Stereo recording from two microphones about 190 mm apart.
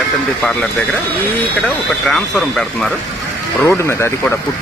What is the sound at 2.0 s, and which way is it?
Speech, 5° left (ahead or behind).